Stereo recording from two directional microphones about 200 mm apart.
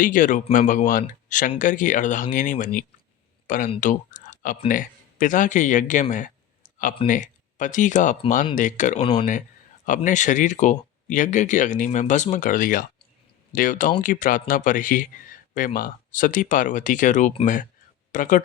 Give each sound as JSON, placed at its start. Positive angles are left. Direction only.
{"t": 0.0, "sound": "speech", "side_deg": 40}